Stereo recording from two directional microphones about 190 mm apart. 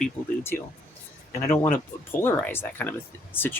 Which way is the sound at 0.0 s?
10° left (ahead or behind).